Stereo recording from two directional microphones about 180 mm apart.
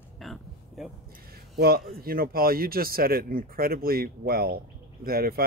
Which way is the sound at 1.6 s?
55° right (ahead or behind).